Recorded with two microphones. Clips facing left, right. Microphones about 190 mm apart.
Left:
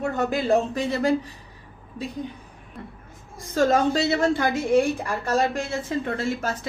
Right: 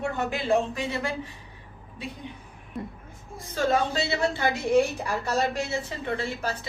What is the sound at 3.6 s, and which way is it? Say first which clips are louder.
Speech: left 5 dB; 45° left (ahead or behind).